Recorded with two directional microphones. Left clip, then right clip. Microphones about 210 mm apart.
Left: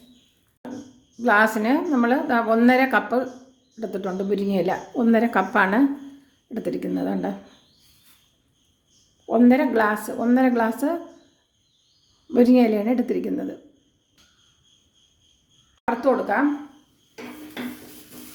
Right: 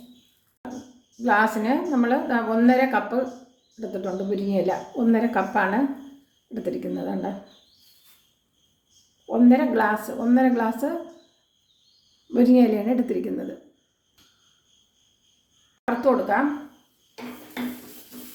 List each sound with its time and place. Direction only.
1.2 s a woman's voice: 30° left (ahead or behind)
9.2 s a woman's voice: 35° left (ahead or behind)
12.3 s a woman's voice: 25° left (ahead or behind)
16.0 s speech: 15° left (ahead or behind)